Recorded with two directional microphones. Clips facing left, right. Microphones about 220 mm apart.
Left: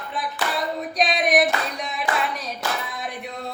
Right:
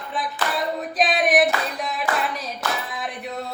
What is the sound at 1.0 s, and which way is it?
Female singing, centre (ahead or behind).